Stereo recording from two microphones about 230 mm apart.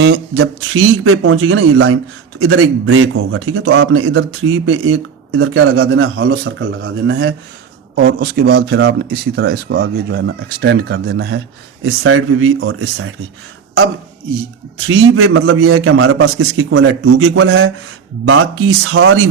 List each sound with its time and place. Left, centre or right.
0.0 s speech: right
1.0 s a man's voice: right
7.9 s speech: right
12.0 s a man's voice: right
14.8 s a man's voice: right